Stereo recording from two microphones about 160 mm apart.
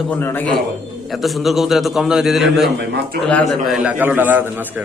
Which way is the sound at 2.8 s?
90° right.